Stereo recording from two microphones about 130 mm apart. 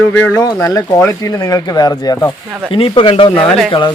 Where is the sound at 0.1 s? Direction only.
15° left (ahead or behind).